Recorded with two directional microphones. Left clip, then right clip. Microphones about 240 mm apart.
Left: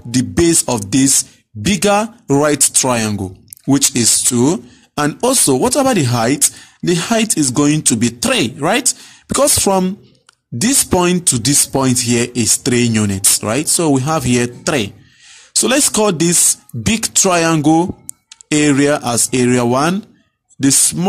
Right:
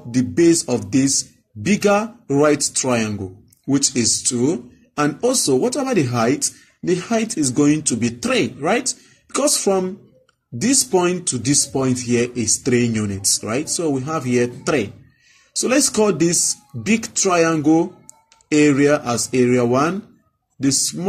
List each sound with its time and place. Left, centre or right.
0.1 s speech: left